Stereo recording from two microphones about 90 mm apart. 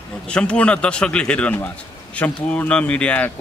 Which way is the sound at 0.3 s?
15° left (ahead or behind).